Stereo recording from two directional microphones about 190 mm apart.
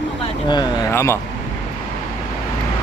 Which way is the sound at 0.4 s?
20° left (ahead or behind).